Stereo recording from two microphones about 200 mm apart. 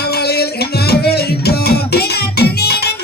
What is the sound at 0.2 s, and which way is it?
Music, 55° left (ahead or behind).